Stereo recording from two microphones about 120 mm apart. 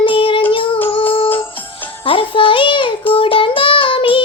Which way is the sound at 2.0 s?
45° left (ahead or behind).